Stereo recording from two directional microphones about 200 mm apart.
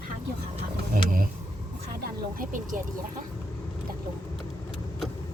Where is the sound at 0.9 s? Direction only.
45° right (ahead or behind).